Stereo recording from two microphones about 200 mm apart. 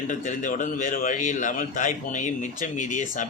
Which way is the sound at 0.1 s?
40° left (ahead or behind).